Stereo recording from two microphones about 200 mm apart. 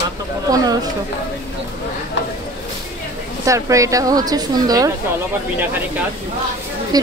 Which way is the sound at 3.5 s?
15° right (ahead or behind).